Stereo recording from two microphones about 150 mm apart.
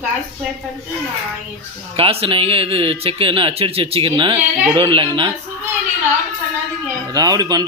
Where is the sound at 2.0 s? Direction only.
40° right (ahead or behind).